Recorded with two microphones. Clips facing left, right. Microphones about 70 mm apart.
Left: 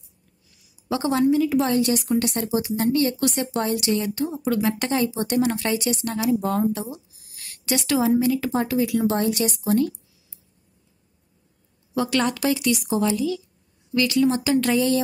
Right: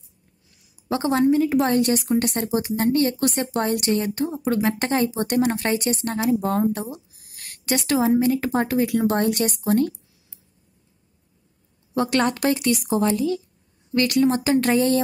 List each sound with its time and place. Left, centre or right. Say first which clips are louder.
0.8 s speech: right 1 dB; right
11.9 s speech: right 2 dB; right